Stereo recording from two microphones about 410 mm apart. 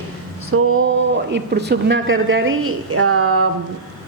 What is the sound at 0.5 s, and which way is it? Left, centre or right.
A woman's voice, right.